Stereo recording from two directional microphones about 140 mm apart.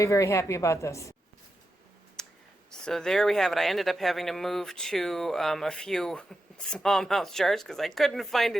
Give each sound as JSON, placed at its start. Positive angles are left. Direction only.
{"t": 0.0, "sound": "a woman's voice", "side_deg": 20}
{"t": 2.2, "sound": "a sound", "side_deg": 5}
{"t": 2.6, "sound": "speech", "side_deg": 5}